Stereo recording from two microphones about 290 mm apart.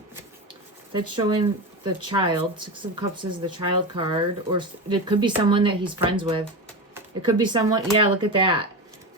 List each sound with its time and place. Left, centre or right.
0.9 s speech: centre
7.4 s speech: centre